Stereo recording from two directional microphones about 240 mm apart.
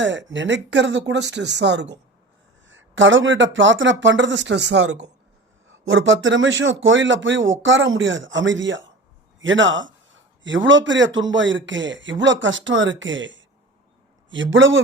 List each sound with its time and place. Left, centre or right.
0.0 s a man's voice: right